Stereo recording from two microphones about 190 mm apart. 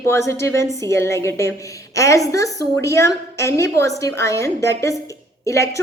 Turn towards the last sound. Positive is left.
turn(degrees=15)  # may be behind; listen again after turning